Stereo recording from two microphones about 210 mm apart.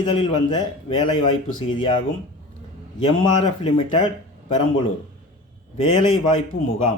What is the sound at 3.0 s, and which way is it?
Speech, 25° left (ahead or behind).